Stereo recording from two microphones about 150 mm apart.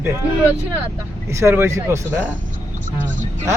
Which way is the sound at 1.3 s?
20° right (ahead or behind).